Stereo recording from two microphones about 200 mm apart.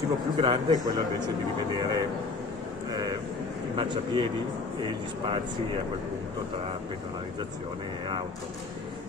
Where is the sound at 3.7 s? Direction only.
25° right (ahead or behind).